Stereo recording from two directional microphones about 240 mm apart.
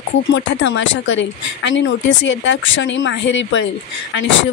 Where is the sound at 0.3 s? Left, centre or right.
Left.